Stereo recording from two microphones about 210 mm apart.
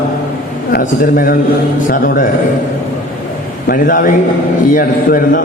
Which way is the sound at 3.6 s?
45° left (ahead or behind).